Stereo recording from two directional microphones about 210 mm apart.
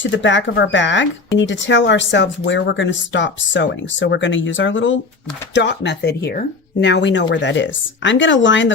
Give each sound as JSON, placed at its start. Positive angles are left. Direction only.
{"t": 0.0, "sound": "speech", "side_deg": 60}